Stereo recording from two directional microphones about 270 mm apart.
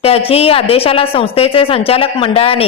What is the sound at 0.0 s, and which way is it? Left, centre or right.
A woman's voice, left.